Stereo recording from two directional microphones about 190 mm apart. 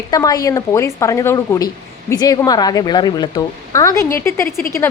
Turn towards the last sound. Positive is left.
turn(degrees=15)  # may be behind; listen again after turning